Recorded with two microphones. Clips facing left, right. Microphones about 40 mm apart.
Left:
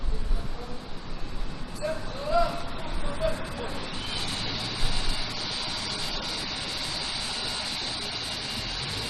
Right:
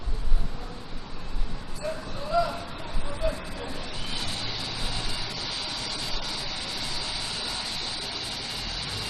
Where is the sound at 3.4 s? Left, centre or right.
Left.